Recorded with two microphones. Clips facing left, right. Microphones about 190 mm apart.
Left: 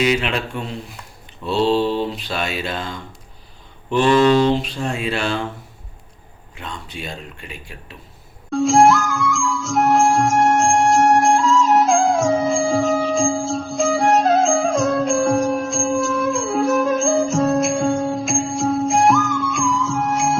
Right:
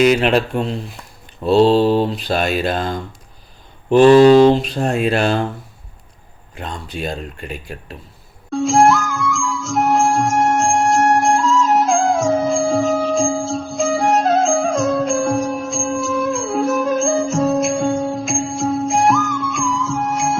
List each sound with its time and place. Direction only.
0.0 s speech: 45° right (ahead or behind)
6.5 s speech: 40° right (ahead or behind)
8.4 s music: centre (ahead or behind)